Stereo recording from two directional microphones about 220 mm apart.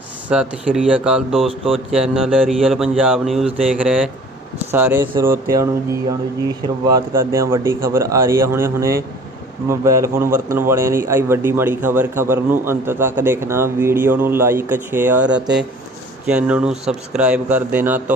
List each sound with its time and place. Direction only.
0.3 s speech: 5° right (ahead or behind)
1.5 s speech: 25° right (ahead or behind)
1.9 s a man's voice: centre (ahead or behind)
6.8 s a man's voice: 15° right (ahead or behind)